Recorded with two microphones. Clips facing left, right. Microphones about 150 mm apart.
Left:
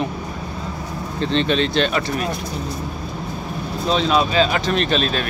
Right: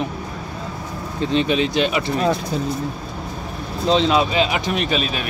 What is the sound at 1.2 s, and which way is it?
Speech, 10° right (ahead or behind).